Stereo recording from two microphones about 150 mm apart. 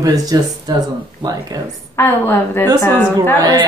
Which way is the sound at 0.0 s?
25° right (ahead or behind).